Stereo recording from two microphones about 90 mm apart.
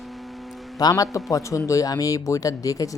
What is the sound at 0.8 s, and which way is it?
Speech, 45° left (ahead or behind).